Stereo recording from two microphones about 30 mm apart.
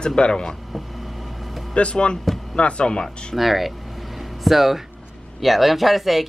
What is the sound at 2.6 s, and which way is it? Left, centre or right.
Speech, left.